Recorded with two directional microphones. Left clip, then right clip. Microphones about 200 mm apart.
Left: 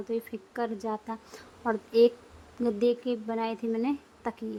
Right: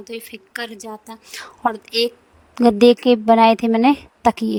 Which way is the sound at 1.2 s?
50° right (ahead or behind).